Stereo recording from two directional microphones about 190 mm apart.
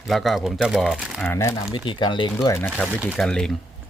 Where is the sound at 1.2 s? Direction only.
15° left (ahead or behind).